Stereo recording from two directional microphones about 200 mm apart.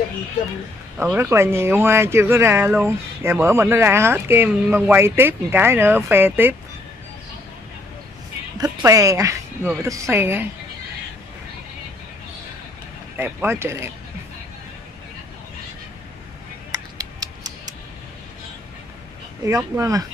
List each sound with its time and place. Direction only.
0.9 s speech: 10° right (ahead or behind)
8.6 s speech: 15° right (ahead or behind)
13.2 s speech: 10° right (ahead or behind)
16.7 s music: 20° right (ahead or behind)
19.4 s speech: 15° right (ahead or behind)